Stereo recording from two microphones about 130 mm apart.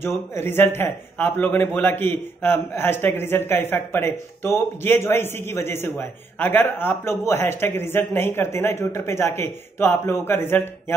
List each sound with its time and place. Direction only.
0.0 s a man's voice: 20° left (ahead or behind)